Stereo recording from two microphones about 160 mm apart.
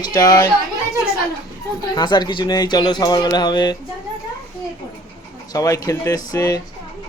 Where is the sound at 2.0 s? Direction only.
25° left (ahead or behind).